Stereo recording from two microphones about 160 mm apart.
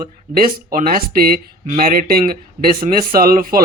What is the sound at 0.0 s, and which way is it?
Speech, 65° right (ahead or behind).